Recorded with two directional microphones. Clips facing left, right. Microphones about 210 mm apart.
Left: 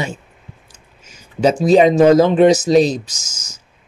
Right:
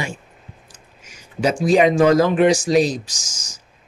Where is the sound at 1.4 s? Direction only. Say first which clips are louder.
Left 4 dB; 25° left (ahead or behind).